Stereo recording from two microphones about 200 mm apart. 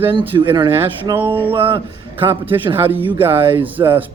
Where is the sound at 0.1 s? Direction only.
25° right (ahead or behind).